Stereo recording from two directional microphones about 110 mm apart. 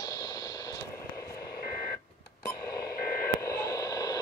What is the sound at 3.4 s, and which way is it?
Radio, 30° left (ahead or behind).